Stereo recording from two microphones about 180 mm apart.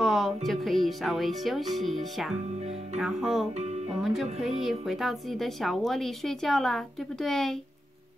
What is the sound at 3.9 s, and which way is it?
Speech, centre (ahead or behind).